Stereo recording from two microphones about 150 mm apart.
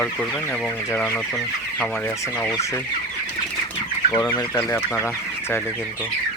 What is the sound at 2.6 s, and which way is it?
Chicken, 20° left (ahead or behind).